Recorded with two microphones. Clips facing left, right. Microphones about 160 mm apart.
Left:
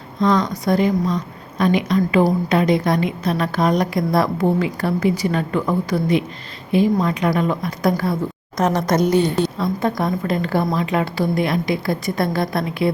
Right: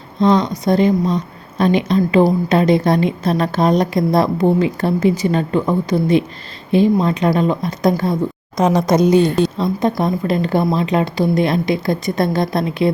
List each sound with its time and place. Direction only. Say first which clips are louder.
0.2 s a woman's voice: right 3 dB; 25° right (ahead or behind)